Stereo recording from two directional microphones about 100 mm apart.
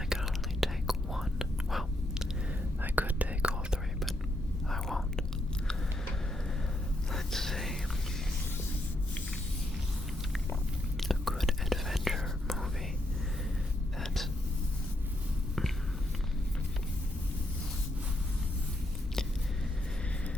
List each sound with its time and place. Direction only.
0.1 s whispering: centre (ahead or behind)
2.8 s whispering: 15° right (ahead or behind)
4.7 s whispering: 5° left (ahead or behind)
7.1 s whispering: 5° left (ahead or behind)
11.0 s whispering: centre (ahead or behind)